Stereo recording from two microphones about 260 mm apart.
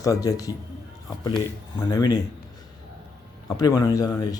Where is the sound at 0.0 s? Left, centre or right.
Centre.